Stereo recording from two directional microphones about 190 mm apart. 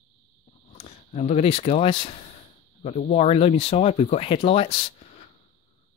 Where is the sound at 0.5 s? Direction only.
30° left (ahead or behind).